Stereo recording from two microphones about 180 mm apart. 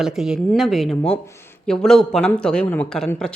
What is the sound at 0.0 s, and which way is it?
A woman's voice, 5° right (ahead or behind).